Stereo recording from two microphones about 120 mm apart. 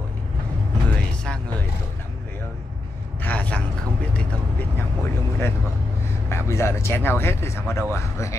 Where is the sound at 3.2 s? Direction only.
10° left (ahead or behind).